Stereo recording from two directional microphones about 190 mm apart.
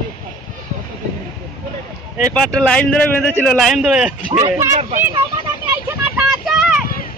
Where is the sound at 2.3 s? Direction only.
5° left (ahead or behind).